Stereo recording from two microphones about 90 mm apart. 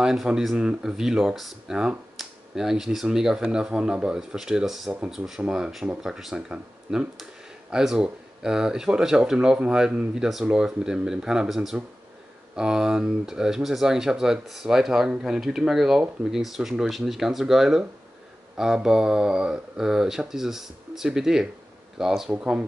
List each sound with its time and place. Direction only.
0.0 s speech: 5° right (ahead or behind)